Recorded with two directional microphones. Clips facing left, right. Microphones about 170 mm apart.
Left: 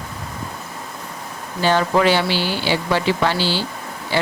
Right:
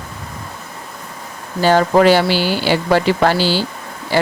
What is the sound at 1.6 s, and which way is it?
Speech, 45° right (ahead or behind).